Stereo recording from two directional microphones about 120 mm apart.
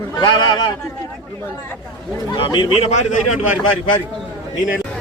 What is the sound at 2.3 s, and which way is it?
Speech, 35° left (ahead or behind).